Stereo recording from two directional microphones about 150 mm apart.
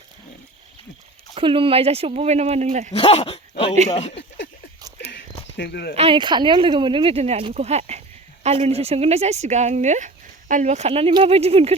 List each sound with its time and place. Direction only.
1.4 s speech: 35° right (ahead or behind); by 2.9 s 50° right (ahead or behind)
2.9 s speech: 45° left (ahead or behind)
5.6 s speech: 90° left
6.0 s speech: 35° right (ahead or behind)